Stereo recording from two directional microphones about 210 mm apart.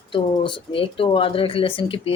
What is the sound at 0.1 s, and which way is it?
Speech, 25° left (ahead or behind).